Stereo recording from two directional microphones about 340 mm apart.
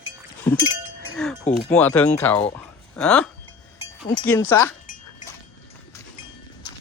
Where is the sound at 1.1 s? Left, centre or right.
Centre.